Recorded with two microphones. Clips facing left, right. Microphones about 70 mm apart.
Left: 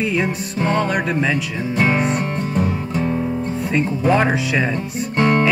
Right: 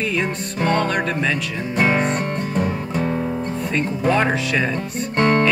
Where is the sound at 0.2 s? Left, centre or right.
Centre.